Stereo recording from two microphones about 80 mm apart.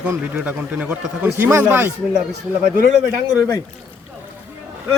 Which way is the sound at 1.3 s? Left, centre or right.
Right.